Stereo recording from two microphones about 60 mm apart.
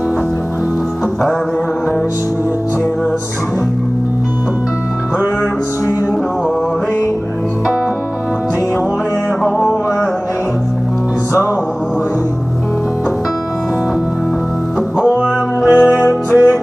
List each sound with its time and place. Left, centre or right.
9.4 s music: centre
15.1 s music: right